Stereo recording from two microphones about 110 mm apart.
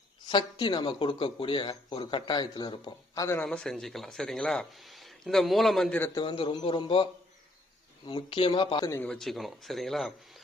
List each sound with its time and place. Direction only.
0.3 s speech: 45° left (ahead or behind)
3.4 s speech: 5° left (ahead or behind)
6.1 s speech: 50° left (ahead or behind)
9.0 s speech: 5° left (ahead or behind)